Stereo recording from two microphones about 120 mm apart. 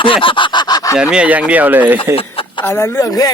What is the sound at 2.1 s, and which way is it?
Speech, 50° left (ahead or behind).